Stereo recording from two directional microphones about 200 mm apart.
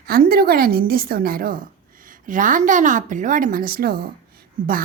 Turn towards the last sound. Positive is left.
turn(degrees=-40)  # may be behind; listen again after turning